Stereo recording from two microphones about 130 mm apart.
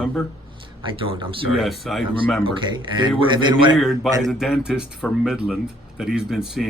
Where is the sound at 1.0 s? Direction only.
40° right (ahead or behind).